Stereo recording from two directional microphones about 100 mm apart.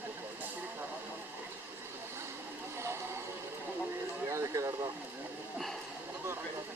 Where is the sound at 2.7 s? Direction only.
25° right (ahead or behind).